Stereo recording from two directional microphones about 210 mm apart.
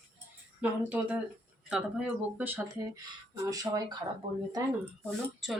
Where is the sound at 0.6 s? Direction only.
5° right (ahead or behind).